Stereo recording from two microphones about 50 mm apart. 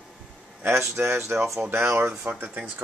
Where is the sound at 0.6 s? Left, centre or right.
Right.